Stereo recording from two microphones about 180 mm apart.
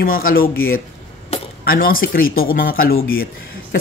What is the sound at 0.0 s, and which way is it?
Speech, 55° left (ahead or behind).